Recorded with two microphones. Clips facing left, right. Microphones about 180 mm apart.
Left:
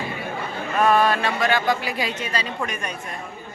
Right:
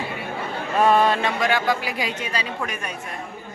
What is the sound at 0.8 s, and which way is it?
Speech, 25° right (ahead or behind).